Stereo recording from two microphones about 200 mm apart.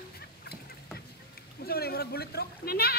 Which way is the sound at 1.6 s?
50° left (ahead or behind).